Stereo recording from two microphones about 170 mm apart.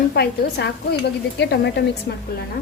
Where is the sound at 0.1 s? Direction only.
70° left (ahead or behind).